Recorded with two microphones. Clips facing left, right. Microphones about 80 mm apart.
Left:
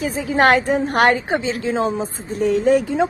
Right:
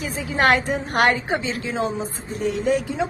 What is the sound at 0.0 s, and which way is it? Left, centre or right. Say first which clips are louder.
A woman's voice: left 4 dB; left.